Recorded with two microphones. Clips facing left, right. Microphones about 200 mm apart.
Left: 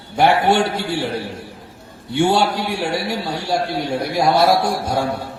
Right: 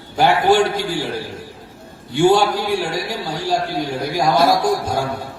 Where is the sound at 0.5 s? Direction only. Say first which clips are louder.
Right 2 dB; 65° left (ahead or behind).